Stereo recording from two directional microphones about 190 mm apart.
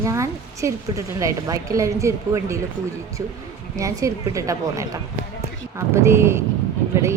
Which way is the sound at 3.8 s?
15° right (ahead or behind).